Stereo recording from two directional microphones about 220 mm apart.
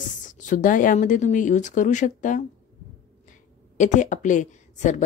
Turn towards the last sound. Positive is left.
turn(degrees=35)  # may be behind; listen again after turning